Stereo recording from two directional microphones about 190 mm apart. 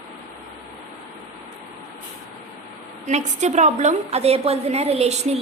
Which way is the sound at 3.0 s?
40° right (ahead or behind).